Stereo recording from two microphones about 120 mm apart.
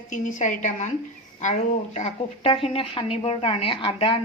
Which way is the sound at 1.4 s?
75° left (ahead or behind).